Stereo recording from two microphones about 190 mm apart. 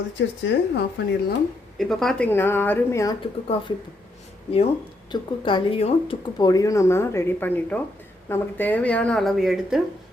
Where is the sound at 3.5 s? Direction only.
30° left (ahead or behind).